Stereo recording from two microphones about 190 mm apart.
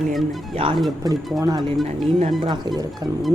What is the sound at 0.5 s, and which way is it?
Speech, 30° right (ahead or behind).